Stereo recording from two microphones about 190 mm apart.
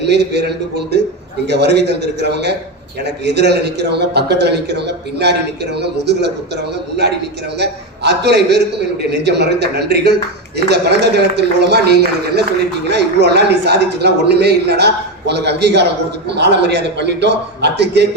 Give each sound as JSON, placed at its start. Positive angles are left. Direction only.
{"t": 0.0, "sound": "a man's voice", "side_deg": -60}
{"t": 7.6, "sound": "a man's voice", "side_deg": -60}